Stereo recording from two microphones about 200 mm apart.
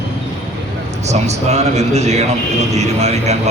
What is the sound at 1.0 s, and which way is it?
A man's voice, 35° right (ahead or behind).